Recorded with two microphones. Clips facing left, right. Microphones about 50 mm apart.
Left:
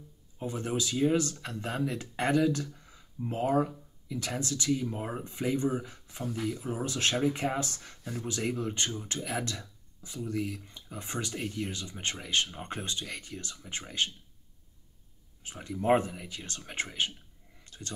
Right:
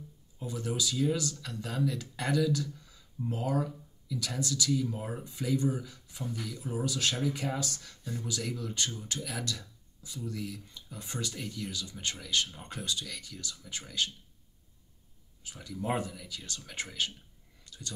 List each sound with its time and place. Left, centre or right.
0.4 s speech: left
15.4 s speech: left
17.6 s a sound: left